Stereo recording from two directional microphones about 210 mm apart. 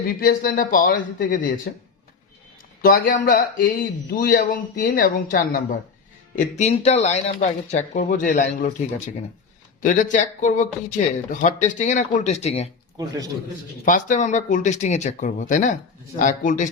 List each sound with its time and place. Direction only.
0.0 s a man's voice: 45° left (ahead or behind)
2.8 s a man's voice: 45° left (ahead or behind)
9.8 s a man's voice: 35° left (ahead or behind)
13.0 s a man's voice: 15° right (ahead or behind)
13.8 s a man's voice: 35° left (ahead or behind)